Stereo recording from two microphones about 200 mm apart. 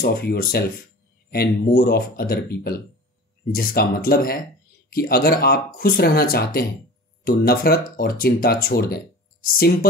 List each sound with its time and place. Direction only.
0.0 s speech: 50° left (ahead or behind)